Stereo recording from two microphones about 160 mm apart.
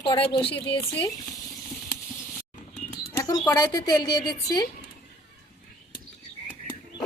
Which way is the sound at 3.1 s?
20° left (ahead or behind).